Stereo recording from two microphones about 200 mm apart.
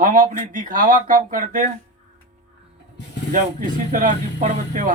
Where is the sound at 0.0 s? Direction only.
40° right (ahead or behind).